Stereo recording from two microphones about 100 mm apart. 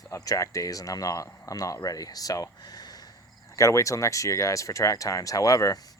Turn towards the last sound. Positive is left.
turn(degrees=35)  # may be behind; listen again after turning